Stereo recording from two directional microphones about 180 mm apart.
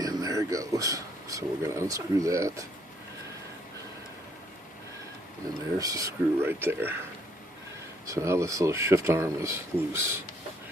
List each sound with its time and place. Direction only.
0.0 s speech: 20° right (ahead or behind)
5.8 s speech: 20° right (ahead or behind)
8.0 s speech: 15° right (ahead or behind)